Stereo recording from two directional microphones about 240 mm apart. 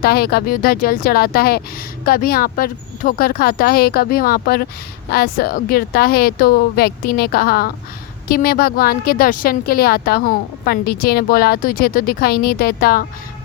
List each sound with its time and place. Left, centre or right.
0.0 s a woman's voice: left